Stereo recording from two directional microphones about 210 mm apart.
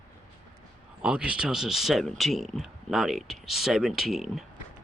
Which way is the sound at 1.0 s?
5° right (ahead or behind).